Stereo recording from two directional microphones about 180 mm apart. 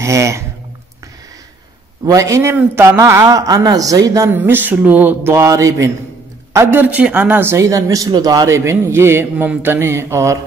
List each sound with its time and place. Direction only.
0.0 s speech: 15° right (ahead or behind)
2.0 s a man's voice: 15° right (ahead or behind)